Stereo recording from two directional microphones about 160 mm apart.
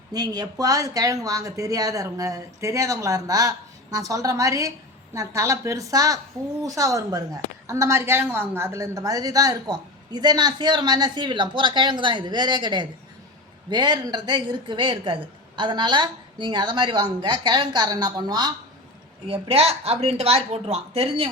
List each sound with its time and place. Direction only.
0.1 s a woman's voice: 25° right (ahead or behind)